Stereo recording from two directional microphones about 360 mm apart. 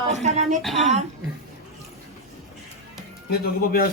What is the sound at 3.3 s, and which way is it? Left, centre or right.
Speech, left.